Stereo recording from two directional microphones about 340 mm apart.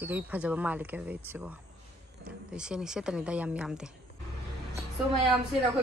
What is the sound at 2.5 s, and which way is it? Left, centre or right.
Speech, centre.